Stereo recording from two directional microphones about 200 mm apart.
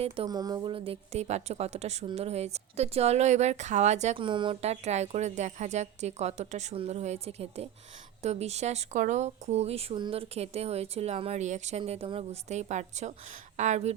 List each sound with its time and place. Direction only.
0.0 s a woman's voice: 25° right (ahead or behind)